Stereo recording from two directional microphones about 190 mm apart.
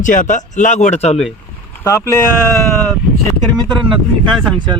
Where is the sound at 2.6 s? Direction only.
Centre (ahead or behind).